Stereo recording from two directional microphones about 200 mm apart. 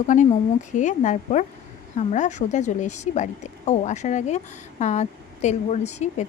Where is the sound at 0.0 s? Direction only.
40° left (ahead or behind).